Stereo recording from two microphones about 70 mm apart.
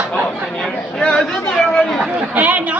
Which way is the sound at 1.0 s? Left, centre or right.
Centre.